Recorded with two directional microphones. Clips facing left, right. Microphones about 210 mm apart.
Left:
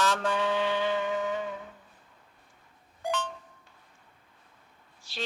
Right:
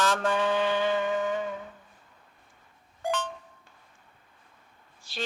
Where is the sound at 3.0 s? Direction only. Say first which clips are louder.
Right 2 dB; 50° right (ahead or behind).